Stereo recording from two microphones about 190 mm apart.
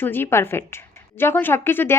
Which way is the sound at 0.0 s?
10° left (ahead or behind).